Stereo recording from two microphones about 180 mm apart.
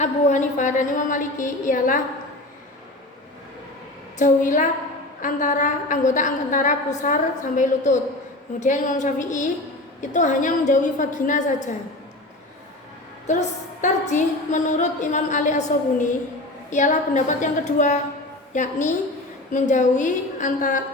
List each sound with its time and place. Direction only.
0.0 s a woman's voice: 40° left (ahead or behind)
4.2 s a woman's voice: 45° left (ahead or behind)
13.2 s a woman's voice: 40° left (ahead or behind)